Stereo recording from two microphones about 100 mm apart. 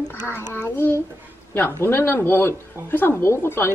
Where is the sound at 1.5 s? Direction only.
25° left (ahead or behind).